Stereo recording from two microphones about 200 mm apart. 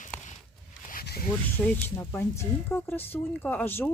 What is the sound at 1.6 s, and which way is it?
Speech, 10° left (ahead or behind).